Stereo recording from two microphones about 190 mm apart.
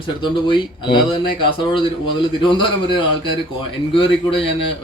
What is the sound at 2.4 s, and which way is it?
Speech, 25° left (ahead or behind).